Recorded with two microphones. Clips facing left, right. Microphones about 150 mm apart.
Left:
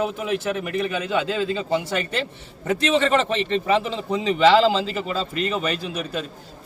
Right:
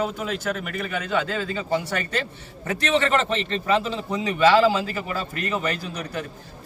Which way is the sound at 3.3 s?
20° left (ahead or behind).